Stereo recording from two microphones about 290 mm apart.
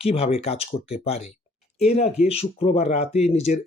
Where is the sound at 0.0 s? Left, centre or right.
Left.